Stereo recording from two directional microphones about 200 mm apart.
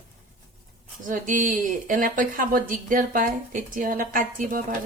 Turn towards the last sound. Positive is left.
turn(degrees=-45)  # may be behind; listen again after turning